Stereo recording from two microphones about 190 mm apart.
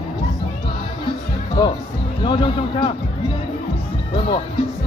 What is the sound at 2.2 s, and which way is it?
Speech, 25° left (ahead or behind).